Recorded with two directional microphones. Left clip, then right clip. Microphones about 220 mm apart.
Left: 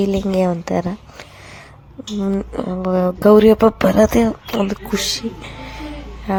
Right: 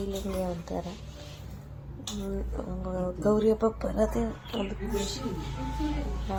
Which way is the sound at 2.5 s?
45° left (ahead or behind).